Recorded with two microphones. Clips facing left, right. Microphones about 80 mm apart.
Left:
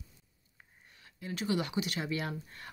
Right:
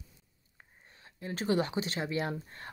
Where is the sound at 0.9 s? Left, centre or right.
Right.